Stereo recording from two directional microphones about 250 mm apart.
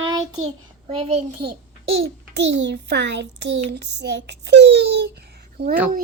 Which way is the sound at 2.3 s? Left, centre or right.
Right.